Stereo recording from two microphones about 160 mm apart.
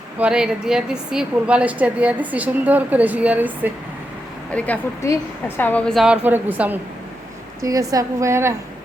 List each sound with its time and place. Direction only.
0.2 s a woman's voice: 5° right (ahead or behind)
4.5 s a woman's voice: 10° left (ahead or behind); by 6.7 s 10° right (ahead or behind)
7.6 s a woman's voice: 20° right (ahead or behind)